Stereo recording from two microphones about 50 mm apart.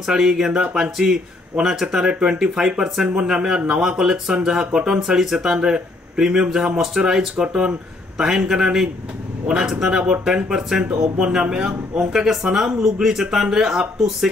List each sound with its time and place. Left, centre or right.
0.0 s speech: centre
0.5 s a sound: right
0.9 s speech: centre